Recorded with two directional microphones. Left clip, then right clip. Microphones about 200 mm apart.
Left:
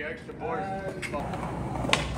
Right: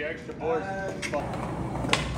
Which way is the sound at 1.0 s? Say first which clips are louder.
Right 2 dB; centre (ahead or behind).